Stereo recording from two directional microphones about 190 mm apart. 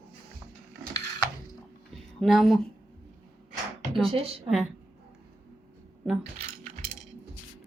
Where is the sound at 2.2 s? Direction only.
Centre (ahead or behind).